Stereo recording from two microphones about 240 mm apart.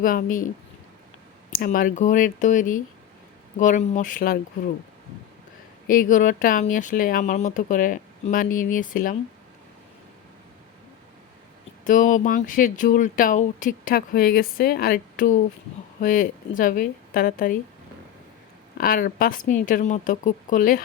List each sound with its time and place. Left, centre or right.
0.0 s speech: left
1.5 s speech: left
5.9 s speech: left
11.9 s speech: left
18.8 s speech: left